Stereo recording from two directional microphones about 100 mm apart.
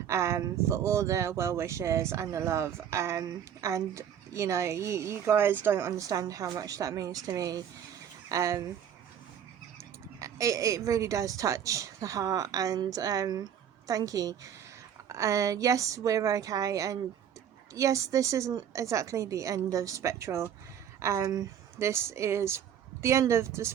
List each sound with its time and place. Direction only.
0.1 s speech: 30° right (ahead or behind)
6.1 s speech: 35° right (ahead or behind)
10.2 s speech: 30° right (ahead or behind)